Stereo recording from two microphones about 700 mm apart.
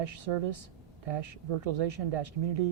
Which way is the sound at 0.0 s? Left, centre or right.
Right.